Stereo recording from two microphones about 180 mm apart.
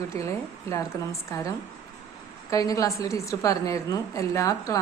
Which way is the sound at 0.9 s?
15° left (ahead or behind).